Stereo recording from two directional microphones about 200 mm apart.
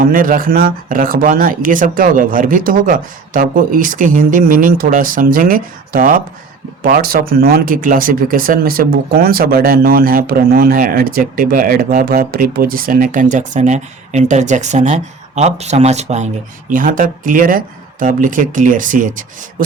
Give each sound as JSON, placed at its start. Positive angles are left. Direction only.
{"t": 0.0, "sound": "speech", "side_deg": -45}